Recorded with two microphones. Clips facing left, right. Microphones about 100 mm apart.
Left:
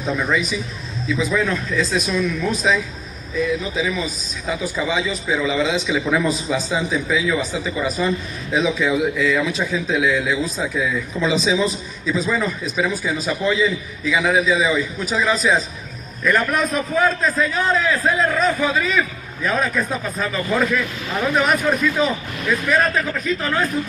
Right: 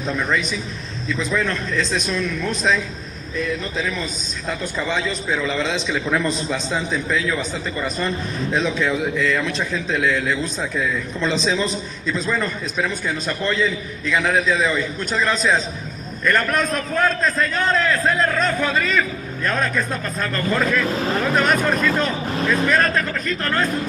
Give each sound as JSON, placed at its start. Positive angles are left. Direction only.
{"t": 0.0, "sound": "a man's voice", "side_deg": 5}
{"t": 20.8, "sound": "speech", "side_deg": -35}
{"t": 21.1, "sound": "a man's voice", "side_deg": 0}